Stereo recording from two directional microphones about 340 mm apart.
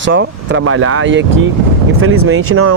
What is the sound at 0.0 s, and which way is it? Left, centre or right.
Speech, right.